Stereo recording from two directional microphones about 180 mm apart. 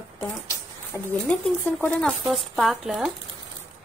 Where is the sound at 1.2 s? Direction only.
10° left (ahead or behind).